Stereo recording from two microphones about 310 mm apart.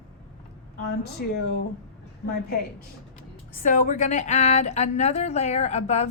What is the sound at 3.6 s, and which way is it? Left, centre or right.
A woman's voice, left.